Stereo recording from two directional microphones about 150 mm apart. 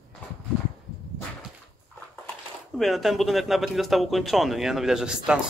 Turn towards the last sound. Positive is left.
turn(degrees=-5)  # may be behind; listen again after turning